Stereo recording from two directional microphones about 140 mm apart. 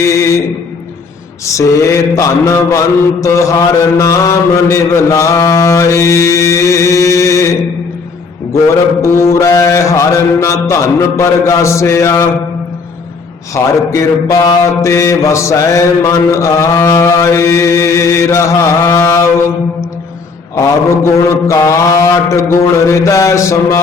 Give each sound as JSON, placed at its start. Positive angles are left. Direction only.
{"t": 0.1, "sound": "mantra", "side_deg": 20}
{"t": 1.5, "sound": "mantra", "side_deg": 20}
{"t": 9.0, "sound": "mantra", "side_deg": 20}
{"t": 13.5, "sound": "mantra", "side_deg": 20}
{"t": 20.6, "sound": "mantra", "side_deg": 20}